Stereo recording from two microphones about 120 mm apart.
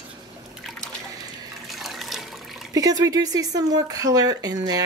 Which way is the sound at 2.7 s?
30° right (ahead or behind).